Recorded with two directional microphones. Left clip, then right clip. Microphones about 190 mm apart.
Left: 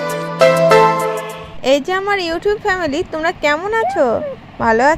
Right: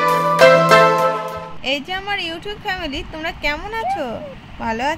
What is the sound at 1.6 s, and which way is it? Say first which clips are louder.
A woman's voice: left 9 dB; 35° left (ahead or behind).